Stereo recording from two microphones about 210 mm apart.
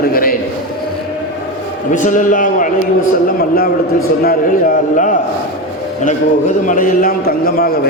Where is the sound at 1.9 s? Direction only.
35° left (ahead or behind).